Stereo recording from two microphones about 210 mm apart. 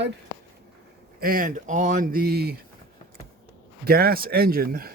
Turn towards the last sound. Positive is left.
turn(degrees=-45)  # may be behind; listen again after turning